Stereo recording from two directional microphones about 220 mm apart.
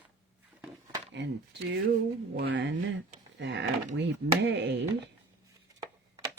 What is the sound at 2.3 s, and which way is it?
Speech, 50° right (ahead or behind).